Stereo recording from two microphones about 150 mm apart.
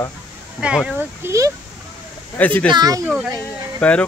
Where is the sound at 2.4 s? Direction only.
10° left (ahead or behind).